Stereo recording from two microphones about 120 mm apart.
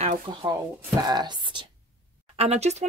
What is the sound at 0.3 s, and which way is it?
Speech, 40° right (ahead or behind).